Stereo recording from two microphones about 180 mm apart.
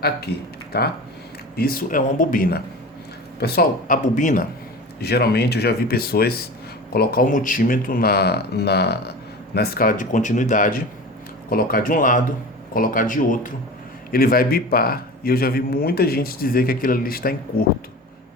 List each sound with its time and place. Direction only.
0.0 s speech: 60° left (ahead or behind); by 4.4 s 45° left (ahead or behind)
4.9 s speech: 60° left (ahead or behind)